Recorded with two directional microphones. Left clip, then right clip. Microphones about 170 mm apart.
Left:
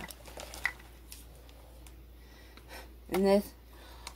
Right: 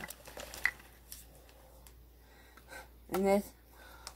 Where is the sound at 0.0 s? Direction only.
20° right (ahead or behind).